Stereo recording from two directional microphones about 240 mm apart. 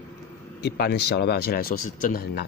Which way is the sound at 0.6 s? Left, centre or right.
Left.